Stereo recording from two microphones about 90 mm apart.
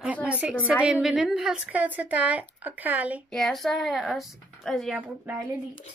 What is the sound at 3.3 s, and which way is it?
Speech, 5° left (ahead or behind).